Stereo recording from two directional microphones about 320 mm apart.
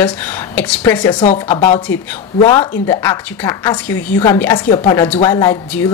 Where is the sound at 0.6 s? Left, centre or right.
Centre.